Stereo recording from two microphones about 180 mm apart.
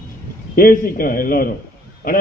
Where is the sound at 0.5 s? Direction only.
50° left (ahead or behind).